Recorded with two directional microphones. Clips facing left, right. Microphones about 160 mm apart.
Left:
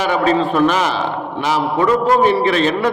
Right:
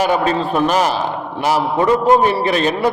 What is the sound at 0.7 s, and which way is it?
Speech, 40° right (ahead or behind).